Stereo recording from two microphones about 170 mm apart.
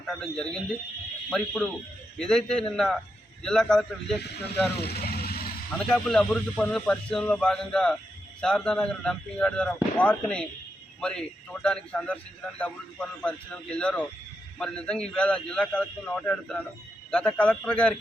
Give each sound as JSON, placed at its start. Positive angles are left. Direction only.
{"t": 0.1, "sound": "a man's voice", "side_deg": 5}
{"t": 4.2, "sound": "speech", "side_deg": 75}
{"t": 4.8, "sound": "vehicle", "side_deg": 65}
{"t": 5.7, "sound": "a man's voice", "side_deg": 5}